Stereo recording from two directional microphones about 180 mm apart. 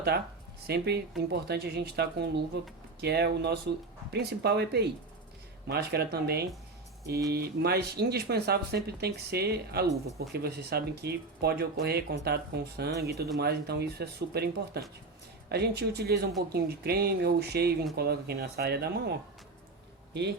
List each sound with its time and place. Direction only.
0.7 s speech: 65° right (ahead or behind)